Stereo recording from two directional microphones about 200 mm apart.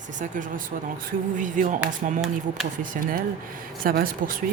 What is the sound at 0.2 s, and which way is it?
Speech, 40° right (ahead or behind).